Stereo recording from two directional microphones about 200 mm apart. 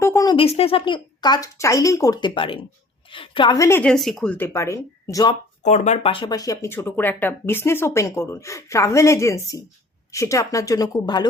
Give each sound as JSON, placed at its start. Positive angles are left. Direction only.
{"t": 0.0, "sound": "speech", "side_deg": 15}
{"t": 5.6, "sound": "speech", "side_deg": 35}